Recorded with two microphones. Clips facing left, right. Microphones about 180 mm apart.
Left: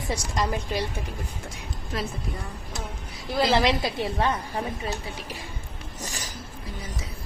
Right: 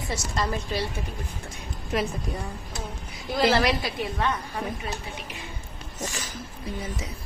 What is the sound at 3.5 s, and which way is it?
Speech, 20° left (ahead or behind).